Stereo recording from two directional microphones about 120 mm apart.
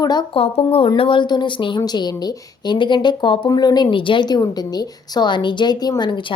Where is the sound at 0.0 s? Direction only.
35° left (ahead or behind).